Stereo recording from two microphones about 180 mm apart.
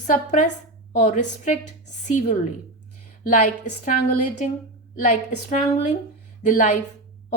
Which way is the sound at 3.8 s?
45° left (ahead or behind).